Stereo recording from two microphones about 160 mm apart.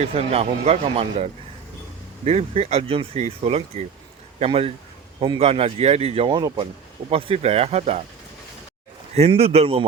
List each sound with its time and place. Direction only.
0.0 s speech: 40° right (ahead or behind)
9.1 s speech: 40° right (ahead or behind)